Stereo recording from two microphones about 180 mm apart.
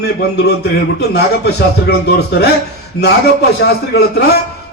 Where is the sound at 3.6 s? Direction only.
65° left (ahead or behind).